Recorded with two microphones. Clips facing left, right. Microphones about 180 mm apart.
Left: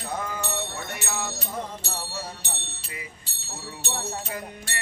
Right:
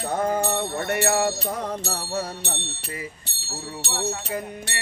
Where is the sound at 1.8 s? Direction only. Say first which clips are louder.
Right 7 dB; 55° right (ahead or behind).